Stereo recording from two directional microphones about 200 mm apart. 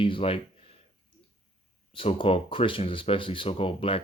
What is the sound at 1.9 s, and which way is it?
Speech, 25° left (ahead or behind).